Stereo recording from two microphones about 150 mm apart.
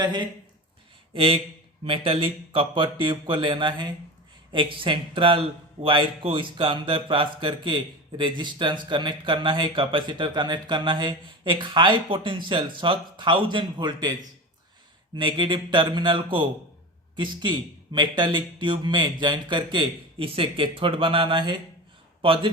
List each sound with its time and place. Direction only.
0.0 s a man's voice: 30° right (ahead or behind)